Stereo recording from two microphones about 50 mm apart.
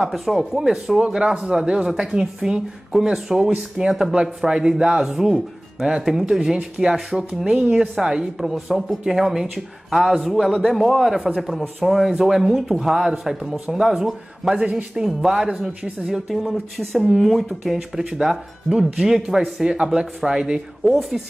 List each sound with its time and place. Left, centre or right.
0.0 s speech: centre
14.5 s a man's voice: right
15.0 s speech: centre